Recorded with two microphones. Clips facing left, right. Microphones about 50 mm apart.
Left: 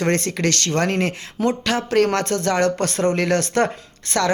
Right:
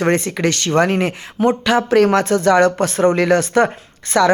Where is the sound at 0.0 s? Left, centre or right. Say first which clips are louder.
Right 4 dB; centre.